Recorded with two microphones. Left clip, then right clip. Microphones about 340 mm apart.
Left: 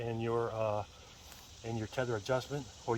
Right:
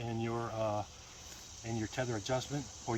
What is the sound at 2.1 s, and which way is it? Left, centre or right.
Speech, centre.